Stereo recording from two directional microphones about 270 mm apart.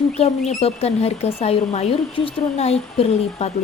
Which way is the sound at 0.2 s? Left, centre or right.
Left.